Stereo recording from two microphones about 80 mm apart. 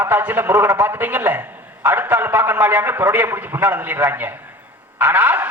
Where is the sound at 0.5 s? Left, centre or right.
Right.